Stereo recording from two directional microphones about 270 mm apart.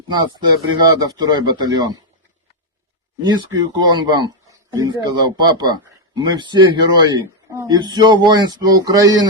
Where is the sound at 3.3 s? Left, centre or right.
Centre.